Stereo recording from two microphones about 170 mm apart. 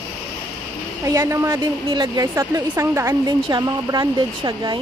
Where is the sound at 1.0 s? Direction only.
20° right (ahead or behind).